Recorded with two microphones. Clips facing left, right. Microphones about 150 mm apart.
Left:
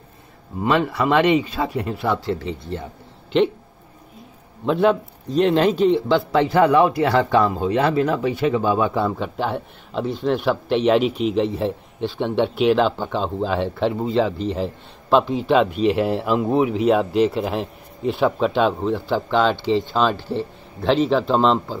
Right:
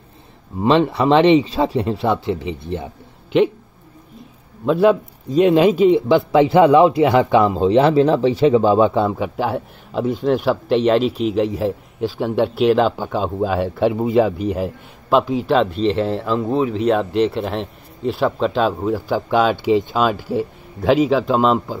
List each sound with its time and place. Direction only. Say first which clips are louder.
0.6 s a man's voice: right 4 dB; 25° right (ahead or behind)
4.6 s a man's voice: right 3 dB; 5° right (ahead or behind); by 9.1 s 25° right (ahead or behind)
9.2 s a man's voice: right 3 dB; 5° right (ahead or behind)